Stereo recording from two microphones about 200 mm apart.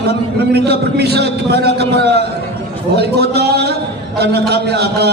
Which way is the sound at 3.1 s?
55° right (ahead or behind).